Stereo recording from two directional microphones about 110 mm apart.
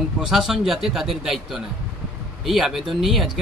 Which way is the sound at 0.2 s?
5° right (ahead or behind).